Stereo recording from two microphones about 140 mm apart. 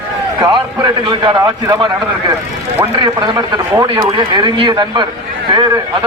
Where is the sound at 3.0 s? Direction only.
30° right (ahead or behind).